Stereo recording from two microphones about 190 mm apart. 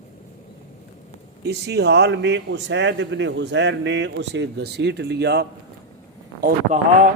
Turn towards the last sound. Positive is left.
turn(degrees=-45)  # may be behind; listen again after turning